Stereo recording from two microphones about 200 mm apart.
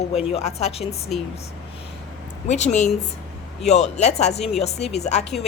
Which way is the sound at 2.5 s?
35° left (ahead or behind).